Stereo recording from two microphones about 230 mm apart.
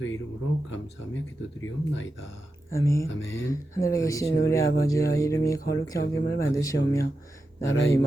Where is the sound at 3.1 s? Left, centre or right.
Left.